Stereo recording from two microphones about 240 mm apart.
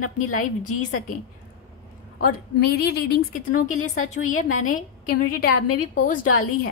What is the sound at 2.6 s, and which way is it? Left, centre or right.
Speech, left.